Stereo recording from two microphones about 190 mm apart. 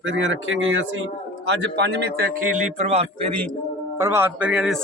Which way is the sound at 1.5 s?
65° right (ahead or behind).